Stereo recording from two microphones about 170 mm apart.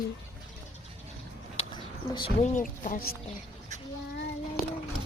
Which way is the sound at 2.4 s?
45° left (ahead or behind).